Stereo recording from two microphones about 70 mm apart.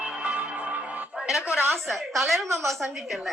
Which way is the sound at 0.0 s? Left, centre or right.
Centre.